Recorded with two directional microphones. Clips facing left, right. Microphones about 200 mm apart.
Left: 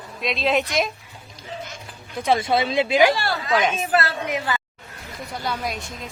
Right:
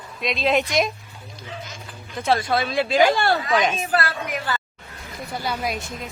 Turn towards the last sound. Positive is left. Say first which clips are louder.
# right 1 dB
turn(degrees=-5)  # may be behind; listen again after turning